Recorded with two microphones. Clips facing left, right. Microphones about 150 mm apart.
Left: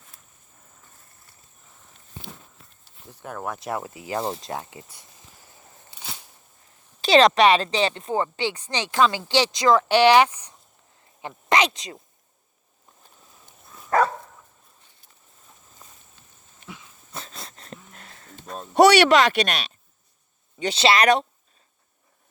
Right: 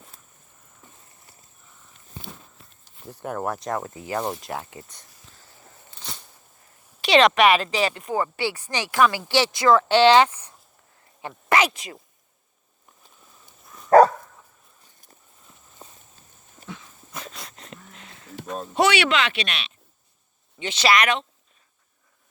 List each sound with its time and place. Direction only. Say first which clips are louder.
2.8 s speech: right 6 dB; 10° right (ahead or behind)
3.7 s speech: right 1 dB; 10° left (ahead or behind)
4.2 s speech: left 1 dB; 25° left (ahead or behind)
4.9 s a sound: left 1 dB; 5° left (ahead or behind)
7.2 s speech: left 1 dB; 35° left (ahead or behind)
13.9 s dog: right 8 dB; 40° right (ahead or behind)
15.8 s walk: right 5 dB; 30° right (ahead or behind)
17.3 s a sound: left 1 dB; 35° left (ahead or behind)
17.9 s a sound: right 1 dB; 45° left (ahead or behind)
18.7 s speech: left 6 dB; 40° left (ahead or behind)